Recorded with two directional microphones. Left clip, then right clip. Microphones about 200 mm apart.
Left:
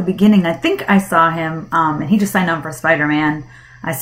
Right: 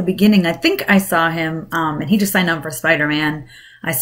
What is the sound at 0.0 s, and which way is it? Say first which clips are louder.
Speech: even; 15° right (ahead or behind).